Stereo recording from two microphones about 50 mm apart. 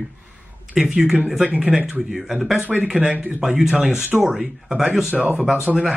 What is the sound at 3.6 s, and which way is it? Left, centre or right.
Speech, centre.